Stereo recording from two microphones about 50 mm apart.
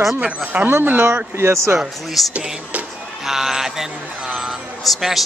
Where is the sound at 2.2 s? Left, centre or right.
Centre.